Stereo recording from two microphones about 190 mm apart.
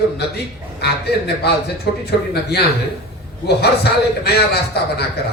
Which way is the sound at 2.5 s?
60° left (ahead or behind).